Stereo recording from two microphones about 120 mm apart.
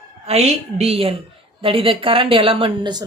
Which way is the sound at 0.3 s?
60° right (ahead or behind).